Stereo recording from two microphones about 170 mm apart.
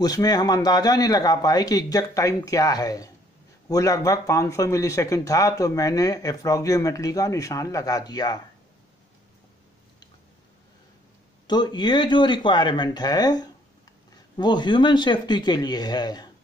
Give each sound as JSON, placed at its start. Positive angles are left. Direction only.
{"t": 0.0, "sound": "speech", "side_deg": 20}
{"t": 11.4, "sound": "speech", "side_deg": 25}